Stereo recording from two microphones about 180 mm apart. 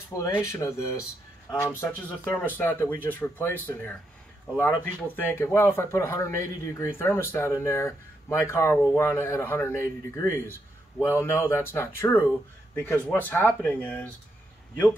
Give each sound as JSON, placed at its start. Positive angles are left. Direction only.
{"t": 0.2, "sound": "speech", "side_deg": 15}